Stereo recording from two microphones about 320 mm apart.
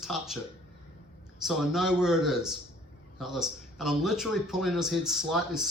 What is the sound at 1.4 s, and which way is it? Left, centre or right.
Speech, centre.